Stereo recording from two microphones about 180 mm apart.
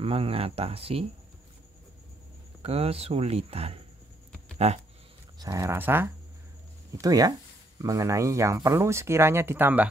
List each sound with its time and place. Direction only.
0.0 s speech: 30° right (ahead or behind)
2.6 s speech: 35° right (ahead or behind)
5.4 s speech: 20° right (ahead or behind)